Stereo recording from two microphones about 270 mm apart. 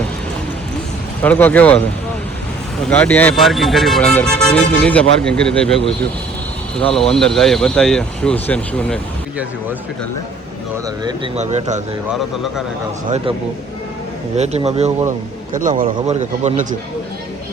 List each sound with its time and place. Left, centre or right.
1.2 s speech: centre
2.9 s speech: centre
11.0 s speech: right
13.1 s speech: centre
14.3 s speech: right